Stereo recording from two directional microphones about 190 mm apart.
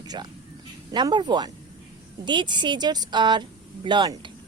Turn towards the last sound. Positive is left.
turn(degrees=-25)  # may be behind; listen again after turning